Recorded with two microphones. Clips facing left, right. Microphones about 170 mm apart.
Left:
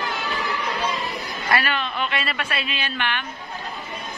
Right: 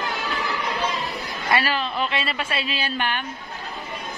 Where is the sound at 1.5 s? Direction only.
30° right (ahead or behind).